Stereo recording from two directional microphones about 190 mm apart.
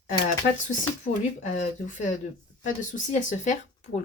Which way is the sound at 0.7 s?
40° left (ahead or behind).